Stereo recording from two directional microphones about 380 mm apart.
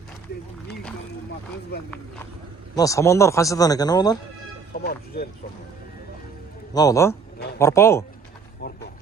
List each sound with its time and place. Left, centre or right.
2.7 s speech: centre
4.7 s speech: left
6.7 s speech: centre